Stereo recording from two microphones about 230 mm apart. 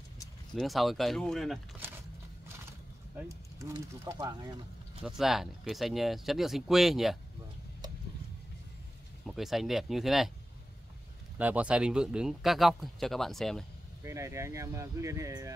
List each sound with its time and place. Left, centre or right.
0.6 s speech: centre
3.3 s speech: centre
5.0 s speech: centre
9.2 s speech: centre
11.3 s speech: centre
14.0 s speech: centre